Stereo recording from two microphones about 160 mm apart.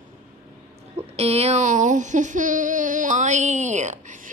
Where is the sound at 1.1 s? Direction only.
40° right (ahead or behind).